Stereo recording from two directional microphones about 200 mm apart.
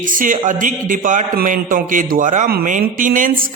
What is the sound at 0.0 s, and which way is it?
A man's voice, 40° right (ahead or behind).